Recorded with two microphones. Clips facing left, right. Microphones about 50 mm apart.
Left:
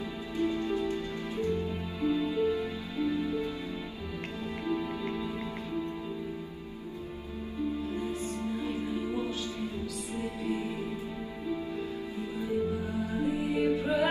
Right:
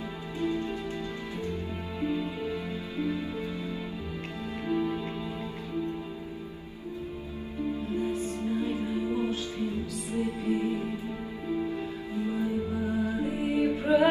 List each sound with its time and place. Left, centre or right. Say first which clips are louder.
0.7 s music: left 3 dB; right
4.6 s music: right 4 dB; right
8.5 s music: right 4 dB; right
12.2 s music: right 2 dB; right